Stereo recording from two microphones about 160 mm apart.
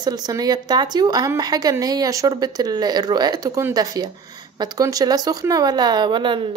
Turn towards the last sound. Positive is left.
turn(degrees=-30)  # may be behind; listen again after turning